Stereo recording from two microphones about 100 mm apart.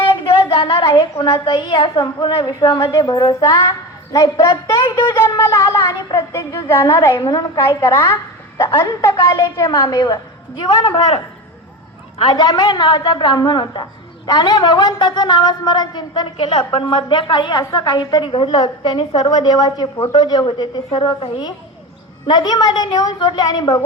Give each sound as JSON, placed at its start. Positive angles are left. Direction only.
{"t": 0.5, "sound": "a sound", "side_deg": 60}
{"t": 1.3, "sound": "a woman's voice", "side_deg": 55}
{"t": 7.3, "sound": "a woman's voice", "side_deg": 40}
{"t": 7.7, "sound": "a woman's voice", "side_deg": 25}
{"t": 9.6, "sound": "a woman's voice", "side_deg": 40}
{"t": 12.2, "sound": "a woman's voice", "side_deg": 45}
{"t": 22.3, "sound": "a woman's voice", "side_deg": 40}